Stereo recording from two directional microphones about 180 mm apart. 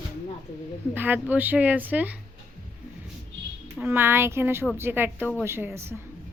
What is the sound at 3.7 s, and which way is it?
A woman's voice, 10° right (ahead or behind).